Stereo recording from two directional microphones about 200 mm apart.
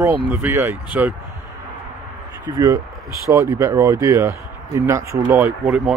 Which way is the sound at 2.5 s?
20° right (ahead or behind).